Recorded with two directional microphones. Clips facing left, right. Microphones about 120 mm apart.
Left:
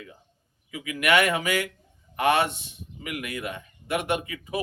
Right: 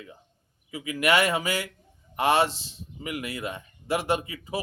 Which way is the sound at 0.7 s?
30° right (ahead or behind).